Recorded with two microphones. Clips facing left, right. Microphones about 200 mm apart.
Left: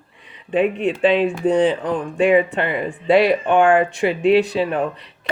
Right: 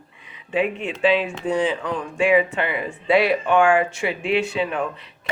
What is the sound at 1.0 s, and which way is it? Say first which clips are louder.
Speech: left 2 dB; 55° left (ahead or behind).